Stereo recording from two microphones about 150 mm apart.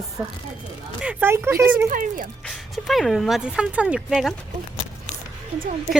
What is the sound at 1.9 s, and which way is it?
Speech, 65° right (ahead or behind).